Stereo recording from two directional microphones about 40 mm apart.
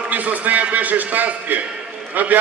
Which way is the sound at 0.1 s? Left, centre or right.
Right.